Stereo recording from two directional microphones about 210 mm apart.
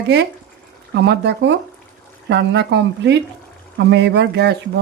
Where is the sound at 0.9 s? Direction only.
55° right (ahead or behind).